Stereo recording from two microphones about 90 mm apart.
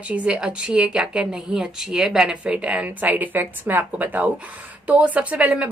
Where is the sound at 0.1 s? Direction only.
15° right (ahead or behind).